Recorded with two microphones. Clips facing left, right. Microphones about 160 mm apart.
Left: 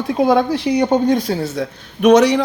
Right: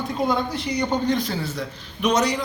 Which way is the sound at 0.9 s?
45° left (ahead or behind).